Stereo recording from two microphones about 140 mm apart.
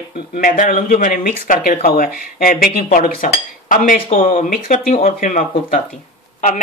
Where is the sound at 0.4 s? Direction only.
75° left (ahead or behind).